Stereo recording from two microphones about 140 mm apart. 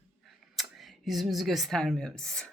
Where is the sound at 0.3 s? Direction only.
Centre (ahead or behind).